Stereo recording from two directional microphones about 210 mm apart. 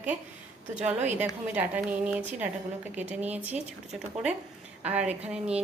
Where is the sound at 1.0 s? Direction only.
35° right (ahead or behind).